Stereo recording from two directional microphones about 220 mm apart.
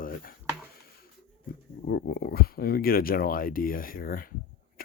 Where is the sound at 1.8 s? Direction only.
45° left (ahead or behind).